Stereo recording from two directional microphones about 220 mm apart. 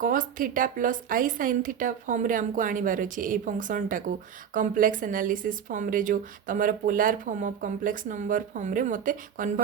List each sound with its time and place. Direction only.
0.0 s a woman's voice: 40° right (ahead or behind)